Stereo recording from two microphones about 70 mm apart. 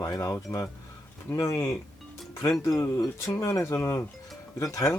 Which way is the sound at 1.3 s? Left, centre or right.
Left.